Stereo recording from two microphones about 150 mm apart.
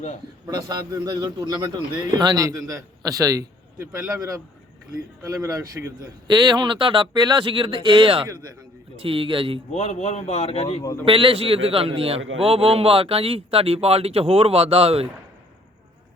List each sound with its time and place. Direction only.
0.5 s a man's voice: 25° right (ahead or behind)
5.3 s a man's voice: 20° right (ahead or behind)
9.7 s speech: 50° left (ahead or behind)
11.0 s a man's voice: 35° right (ahead or behind)